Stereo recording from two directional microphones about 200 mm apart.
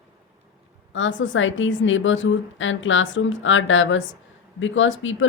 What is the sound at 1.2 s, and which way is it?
Speech, 70° left (ahead or behind).